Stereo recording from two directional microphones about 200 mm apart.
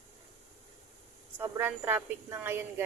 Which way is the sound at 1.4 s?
10° right (ahead or behind).